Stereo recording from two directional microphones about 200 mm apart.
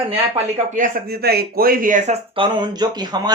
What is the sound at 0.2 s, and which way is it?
Speech, 35° right (ahead or behind).